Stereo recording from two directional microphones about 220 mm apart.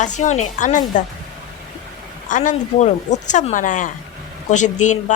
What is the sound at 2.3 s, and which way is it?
Speech, 35° left (ahead or behind).